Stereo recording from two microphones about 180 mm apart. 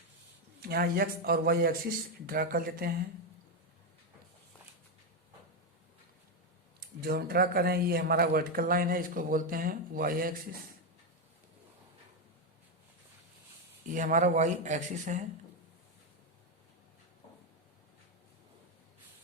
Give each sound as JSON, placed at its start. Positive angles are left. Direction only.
{"t": 0.6, "sound": "a man's voice", "side_deg": -55}
{"t": 7.0, "sound": "a man's voice", "side_deg": -55}
{"t": 13.9, "sound": "a man's voice", "side_deg": -45}